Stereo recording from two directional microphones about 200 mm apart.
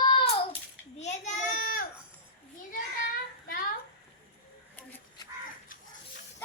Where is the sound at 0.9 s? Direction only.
35° left (ahead or behind).